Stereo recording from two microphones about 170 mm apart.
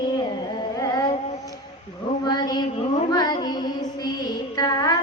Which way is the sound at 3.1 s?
25° left (ahead or behind).